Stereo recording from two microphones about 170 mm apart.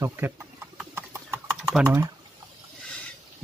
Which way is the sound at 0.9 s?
15° right (ahead or behind).